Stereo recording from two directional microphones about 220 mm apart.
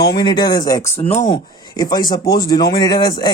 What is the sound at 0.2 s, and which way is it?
Speech, 20° left (ahead or behind).